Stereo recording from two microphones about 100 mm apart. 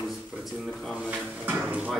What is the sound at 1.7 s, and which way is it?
Speech, 15° right (ahead or behind).